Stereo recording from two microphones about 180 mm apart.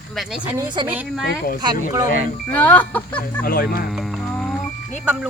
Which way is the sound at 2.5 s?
10° left (ahead or behind).